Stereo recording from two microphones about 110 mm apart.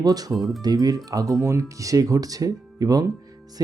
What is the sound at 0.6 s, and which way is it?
Speech, 35° right (ahead or behind).